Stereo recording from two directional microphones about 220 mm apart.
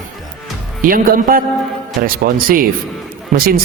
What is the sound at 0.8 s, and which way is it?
Speech, 40° right (ahead or behind).